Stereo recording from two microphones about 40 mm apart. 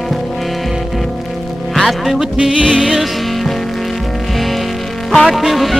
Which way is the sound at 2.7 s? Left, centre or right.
Centre.